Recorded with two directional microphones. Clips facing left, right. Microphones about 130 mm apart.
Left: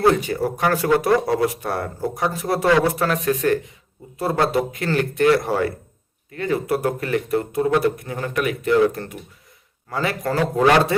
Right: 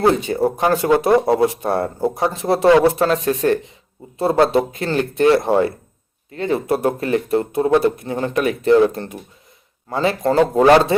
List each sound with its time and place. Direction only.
0.0 s speech: 25° right (ahead or behind)